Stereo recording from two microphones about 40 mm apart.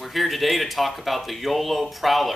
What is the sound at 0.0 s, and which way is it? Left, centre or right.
Speech, centre.